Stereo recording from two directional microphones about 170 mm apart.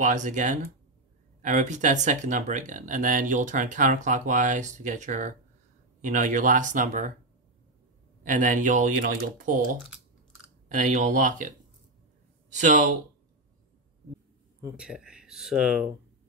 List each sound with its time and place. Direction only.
0.0 s speech: 45° right (ahead or behind)
8.2 s speech: 50° right (ahead or behind)
10.7 s speech: 45° right (ahead or behind)
14.8 s speech: 5° right (ahead or behind)